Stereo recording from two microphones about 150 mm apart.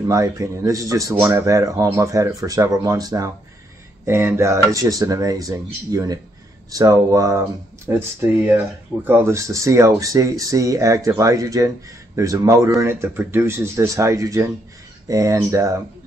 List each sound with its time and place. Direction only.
0.1 s speech: 20° right (ahead or behind)